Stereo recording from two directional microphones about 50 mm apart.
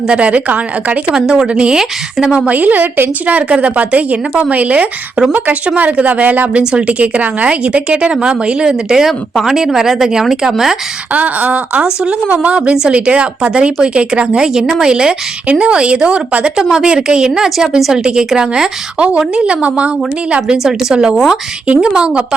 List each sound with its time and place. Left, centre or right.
0.1 s a woman's voice: right
1.1 s speech: centre
1.8 s speech: centre
2.5 s speech: right
3.2 s a woman's voice: right
6.5 s a woman's voice: centre
9.0 s speech: centre
11.1 s a woman's voice: right; by 18.0 s centre
18.0 s a woman's voice: centre